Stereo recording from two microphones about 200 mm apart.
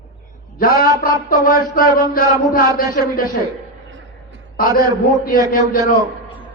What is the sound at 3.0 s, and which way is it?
Speech, 45° left (ahead or behind).